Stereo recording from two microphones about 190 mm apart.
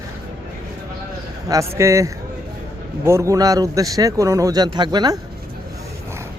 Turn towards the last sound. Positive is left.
turn(degrees=-20)  # may be behind; listen again after turning